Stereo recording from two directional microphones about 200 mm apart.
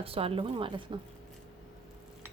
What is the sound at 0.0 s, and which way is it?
Speech, 30° right (ahead or behind).